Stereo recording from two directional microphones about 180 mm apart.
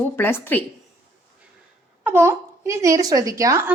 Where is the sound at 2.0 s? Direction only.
10° right (ahead or behind).